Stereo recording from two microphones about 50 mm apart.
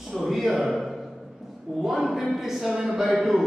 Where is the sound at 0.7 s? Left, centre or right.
Centre.